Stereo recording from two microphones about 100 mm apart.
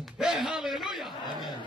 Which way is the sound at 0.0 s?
Centre (ahead or behind).